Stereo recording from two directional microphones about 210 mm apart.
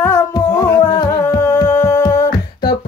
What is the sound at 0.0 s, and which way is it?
Music, 10° left (ahead or behind).